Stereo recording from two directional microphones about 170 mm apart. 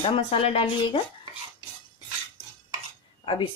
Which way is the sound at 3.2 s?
30° left (ahead or behind).